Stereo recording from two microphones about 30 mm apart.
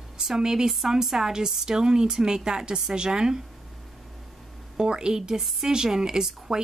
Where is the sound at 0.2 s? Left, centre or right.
Centre.